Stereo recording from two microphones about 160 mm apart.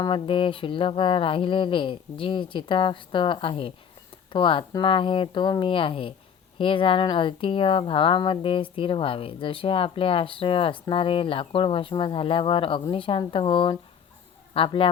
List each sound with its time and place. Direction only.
0.0 s speech: 30° left (ahead or behind)